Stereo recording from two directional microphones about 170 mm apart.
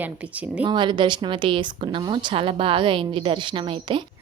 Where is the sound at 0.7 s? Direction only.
25° right (ahead or behind).